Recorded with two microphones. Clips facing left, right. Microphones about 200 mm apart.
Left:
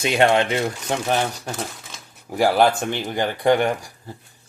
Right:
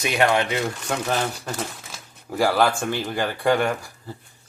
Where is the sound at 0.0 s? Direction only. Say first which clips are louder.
Left 3 dB; 25° left (ahead or behind).